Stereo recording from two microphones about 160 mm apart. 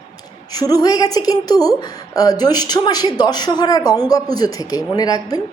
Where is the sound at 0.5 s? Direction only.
25° left (ahead or behind).